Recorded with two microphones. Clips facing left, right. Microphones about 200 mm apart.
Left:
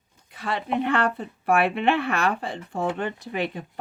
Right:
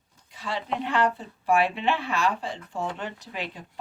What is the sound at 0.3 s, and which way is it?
Speech, 60° left (ahead or behind).